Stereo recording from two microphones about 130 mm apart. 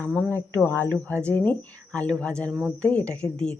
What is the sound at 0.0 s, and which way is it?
A woman's voice, 10° left (ahead or behind).